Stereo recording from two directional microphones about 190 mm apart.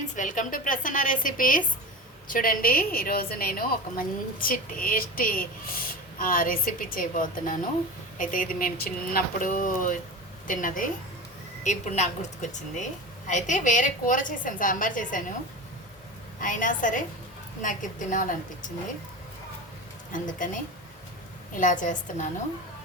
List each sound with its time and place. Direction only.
0.2 s a woman's voice: 45° left (ahead or behind)
16.4 s a woman's voice: 45° left (ahead or behind)
20.1 s a woman's voice: 45° left (ahead or behind)
21.5 s a woman's voice: 45° left (ahead or behind)